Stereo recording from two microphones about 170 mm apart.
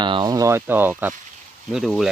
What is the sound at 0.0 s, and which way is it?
Speech, 25° right (ahead or behind).